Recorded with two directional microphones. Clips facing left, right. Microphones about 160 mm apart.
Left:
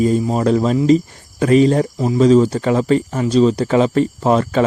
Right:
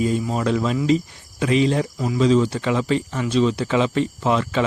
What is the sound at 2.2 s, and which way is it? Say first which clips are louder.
Speech: left 6 dB; 40° left (ahead or behind).